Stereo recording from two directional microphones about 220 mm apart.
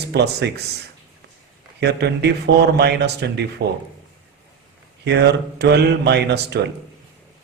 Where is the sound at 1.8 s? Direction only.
50° right (ahead or behind).